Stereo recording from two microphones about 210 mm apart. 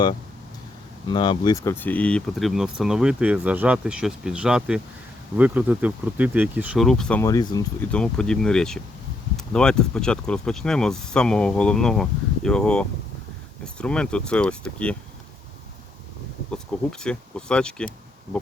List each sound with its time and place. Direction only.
1.0 s speech: 20° left (ahead or behind)
7.9 s speech: 5° left (ahead or behind)
17.0 s speech: 5° left (ahead or behind)